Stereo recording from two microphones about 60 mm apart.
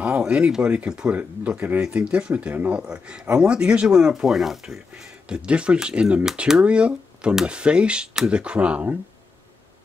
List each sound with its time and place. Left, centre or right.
0.3 s speech: centre
2.5 s speech: right
2.8 s speech: centre
5.3 s speech: centre